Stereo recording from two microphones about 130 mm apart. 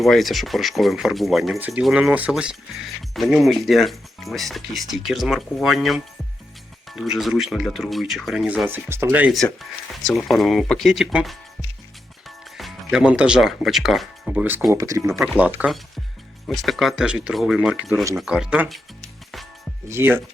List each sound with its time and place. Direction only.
0.0 s speech: centre (ahead or behind)
1.5 s speech: 15° right (ahead or behind)
9.3 s speech: centre (ahead or behind)
12.5 s speech: 5° right (ahead or behind)
14.7 s speech: 25° right (ahead or behind)
15.2 s speech: 10° right (ahead or behind)
18.7 s music: centre (ahead or behind)
19.9 s speech: 15° right (ahead or behind)